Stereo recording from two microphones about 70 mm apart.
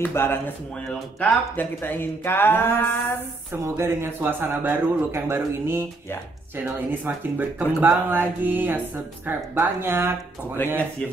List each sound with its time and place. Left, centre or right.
0.0 s speech: left
3.6 s speech: right
10.6 s speech: left